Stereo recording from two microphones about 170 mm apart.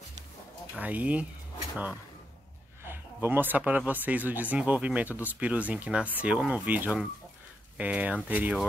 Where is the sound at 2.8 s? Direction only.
15° right (ahead or behind).